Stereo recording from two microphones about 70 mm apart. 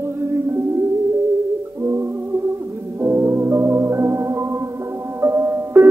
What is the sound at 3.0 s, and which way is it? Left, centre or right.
Organ, right.